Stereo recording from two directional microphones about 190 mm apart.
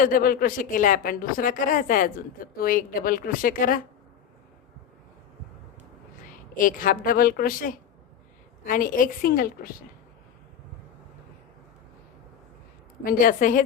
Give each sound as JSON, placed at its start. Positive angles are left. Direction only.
{"t": 0.0, "sound": "speech", "side_deg": 50}
{"t": 6.2, "sound": "a woman's voice", "side_deg": 45}
{"t": 13.0, "sound": "speech", "side_deg": 50}